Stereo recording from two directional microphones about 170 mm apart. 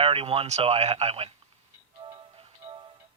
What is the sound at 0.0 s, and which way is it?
A man's voice, 35° right (ahead or behind).